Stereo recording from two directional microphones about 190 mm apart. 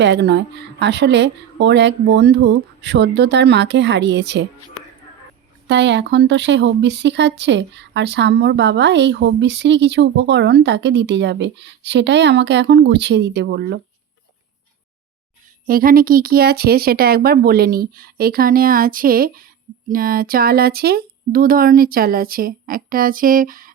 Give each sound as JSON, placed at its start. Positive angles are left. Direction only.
{"t": 0.0, "sound": "speech", "side_deg": -65}
{"t": 5.6, "sound": "speech", "side_deg": -65}
{"t": 15.6, "sound": "speech", "side_deg": -50}